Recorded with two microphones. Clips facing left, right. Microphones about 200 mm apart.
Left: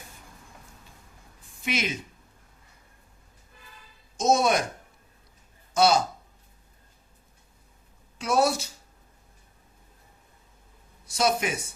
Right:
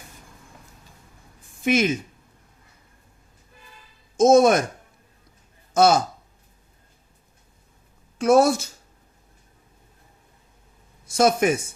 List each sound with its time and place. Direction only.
1.6 s speech: 50° right (ahead or behind)
4.2 s speech: 50° right (ahead or behind)
5.7 s speech: 50° right (ahead or behind)
8.2 s speech: 50° right (ahead or behind)
11.0 s speech: 50° right (ahead or behind)